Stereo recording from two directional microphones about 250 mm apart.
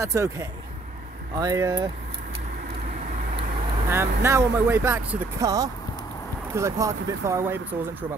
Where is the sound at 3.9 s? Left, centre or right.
Centre.